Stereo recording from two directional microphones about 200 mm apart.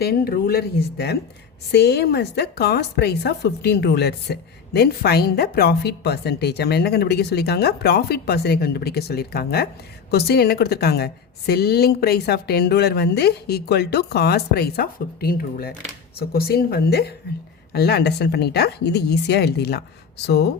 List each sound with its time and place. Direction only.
0.0 s a woman's voice: 50° left (ahead or behind)